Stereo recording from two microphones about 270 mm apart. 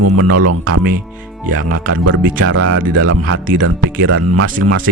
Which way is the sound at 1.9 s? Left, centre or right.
Right.